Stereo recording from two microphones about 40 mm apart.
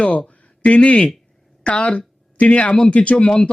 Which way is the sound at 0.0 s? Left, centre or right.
Left.